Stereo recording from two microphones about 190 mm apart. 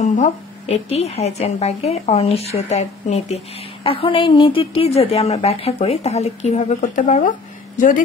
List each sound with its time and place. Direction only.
0.0 s a woman's voice: 35° left (ahead or behind)